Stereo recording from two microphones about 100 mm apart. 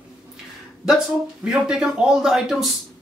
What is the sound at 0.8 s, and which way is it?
Speech, 5° right (ahead or behind).